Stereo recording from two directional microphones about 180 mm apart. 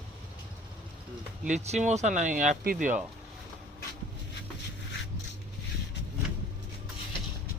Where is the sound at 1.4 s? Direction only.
40° right (ahead or behind).